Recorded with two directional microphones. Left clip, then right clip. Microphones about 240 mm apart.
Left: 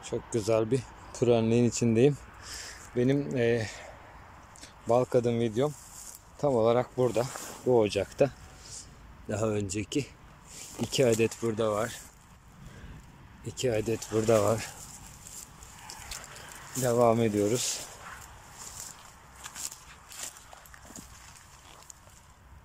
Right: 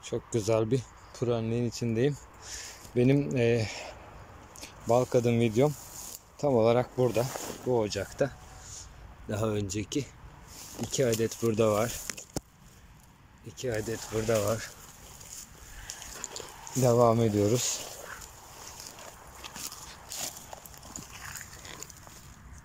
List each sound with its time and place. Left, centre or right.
0.0 s speech: centre
9.3 s speech: centre
13.5 s speech: centre
16.8 s speech: centre